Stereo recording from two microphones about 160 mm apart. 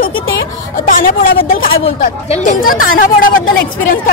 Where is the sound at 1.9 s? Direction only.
45° left (ahead or behind).